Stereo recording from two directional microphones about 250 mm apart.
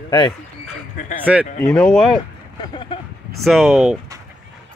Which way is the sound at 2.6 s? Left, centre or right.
Centre.